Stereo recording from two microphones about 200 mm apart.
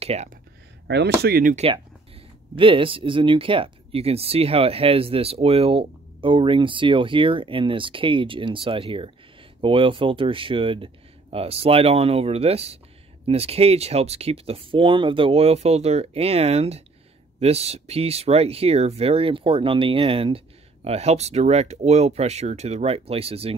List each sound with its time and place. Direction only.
0.0 s speech: 30° right (ahead or behind)
0.8 s speech: 60° right (ahead or behind); by 23.5 s 30° right (ahead or behind)